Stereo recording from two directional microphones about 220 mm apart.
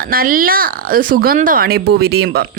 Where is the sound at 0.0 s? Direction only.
40° right (ahead or behind).